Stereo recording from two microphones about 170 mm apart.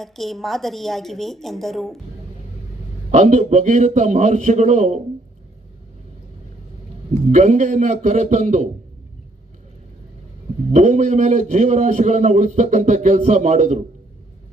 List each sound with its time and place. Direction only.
0.0 s a woman's voice: centre (ahead or behind)
3.1 s a man's voice: 45° right (ahead or behind)
7.3 s a man's voice: 50° right (ahead or behind)
10.7 s a man's voice: 45° right (ahead or behind)